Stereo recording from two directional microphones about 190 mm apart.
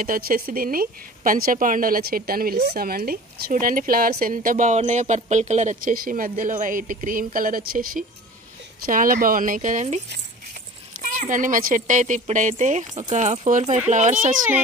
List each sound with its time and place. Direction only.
0.0 s speech: 45° right (ahead or behind)